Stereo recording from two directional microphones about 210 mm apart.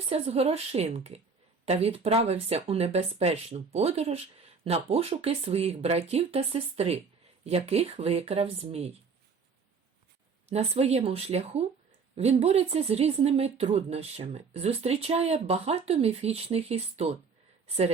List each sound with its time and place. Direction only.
0.1 s speech: 30° right (ahead or behind)
10.5 s speech: 30° right (ahead or behind)